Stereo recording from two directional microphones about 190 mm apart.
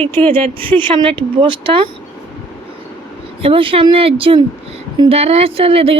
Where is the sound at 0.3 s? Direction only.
30° right (ahead or behind).